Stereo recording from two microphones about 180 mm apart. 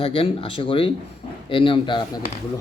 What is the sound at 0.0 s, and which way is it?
Speech, 30° left (ahead or behind).